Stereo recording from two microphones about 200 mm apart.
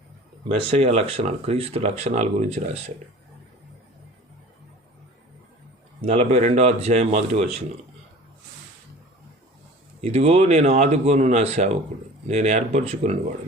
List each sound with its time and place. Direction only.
0.5 s speech: 30° right (ahead or behind)
6.0 s speech: 30° right (ahead or behind)
10.0 s speech: 30° right (ahead or behind)